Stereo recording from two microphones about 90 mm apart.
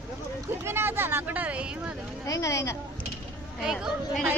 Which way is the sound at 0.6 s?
25° right (ahead or behind).